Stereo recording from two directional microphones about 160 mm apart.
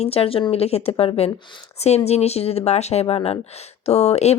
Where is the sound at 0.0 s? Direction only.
40° left (ahead or behind).